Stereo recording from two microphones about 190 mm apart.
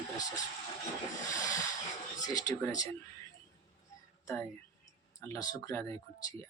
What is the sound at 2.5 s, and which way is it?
Speech, 20° left (ahead or behind).